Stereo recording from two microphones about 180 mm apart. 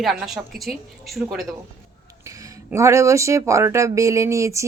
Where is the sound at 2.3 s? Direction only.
15° right (ahead or behind).